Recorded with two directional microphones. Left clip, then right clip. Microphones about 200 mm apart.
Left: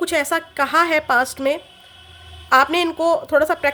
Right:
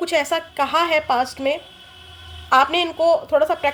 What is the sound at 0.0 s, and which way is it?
A woman's voice, 20° left (ahead or behind).